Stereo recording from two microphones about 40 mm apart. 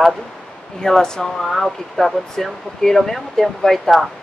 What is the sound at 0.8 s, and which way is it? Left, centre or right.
Speech, centre.